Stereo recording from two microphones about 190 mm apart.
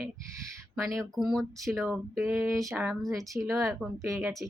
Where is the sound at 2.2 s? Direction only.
15° right (ahead or behind).